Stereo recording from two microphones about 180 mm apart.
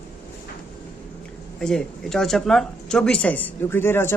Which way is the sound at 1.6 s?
Centre (ahead or behind).